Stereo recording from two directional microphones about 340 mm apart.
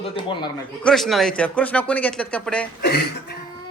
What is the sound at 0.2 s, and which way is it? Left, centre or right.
Speech, centre.